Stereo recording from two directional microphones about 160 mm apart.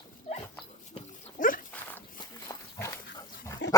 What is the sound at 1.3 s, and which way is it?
Dog, 55° left (ahead or behind).